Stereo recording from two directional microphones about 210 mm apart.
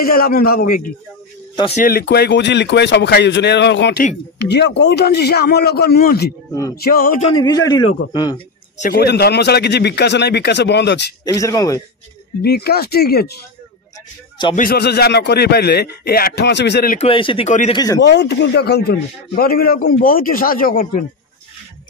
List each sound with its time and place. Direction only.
0.0 s a man's voice: 45° left (ahead or behind)
6.5 s speech: 15° left (ahead or behind)
6.8 s a man's voice: 45° left (ahead or behind)
7.2 s speech: 20° left (ahead or behind)
8.7 s a man's voice: 40° left (ahead or behind)
11.2 s speech: 15° left (ahead or behind)
12.4 s a man's voice: 50° left (ahead or behind)
14.5 s a man's voice: 45° left (ahead or behind)
17.0 s speech: 25° left (ahead or behind)
17.7 s speech: 15° left (ahead or behind)
18.0 s a man's voice: 55° left (ahead or behind)